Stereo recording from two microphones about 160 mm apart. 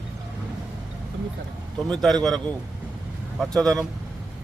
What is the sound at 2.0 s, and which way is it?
Speech, centre (ahead or behind).